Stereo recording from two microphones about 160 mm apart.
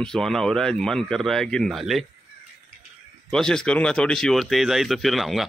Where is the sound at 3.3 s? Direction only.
5° left (ahead or behind).